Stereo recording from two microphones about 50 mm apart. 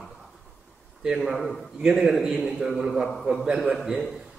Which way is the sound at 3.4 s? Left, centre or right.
Centre.